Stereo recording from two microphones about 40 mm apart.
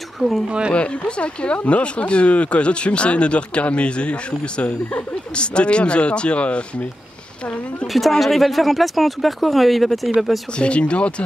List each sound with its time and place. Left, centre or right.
0.2 s speech: centre
0.7 s speech: left
7.8 s speech: centre
10.6 s speech: left